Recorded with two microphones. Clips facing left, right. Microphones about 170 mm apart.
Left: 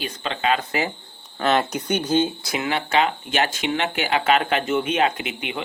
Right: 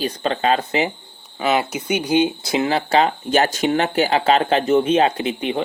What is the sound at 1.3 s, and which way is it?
Speech, 5° right (ahead or behind).